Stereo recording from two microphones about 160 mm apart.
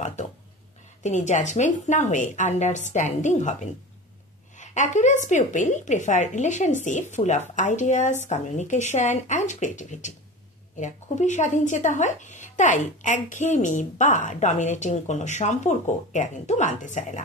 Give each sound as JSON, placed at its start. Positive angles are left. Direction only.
{"t": 0.0, "sound": "a sound", "side_deg": 45}
{"t": 1.0, "sound": "speech", "side_deg": 50}
{"t": 4.6, "sound": "speech", "side_deg": 50}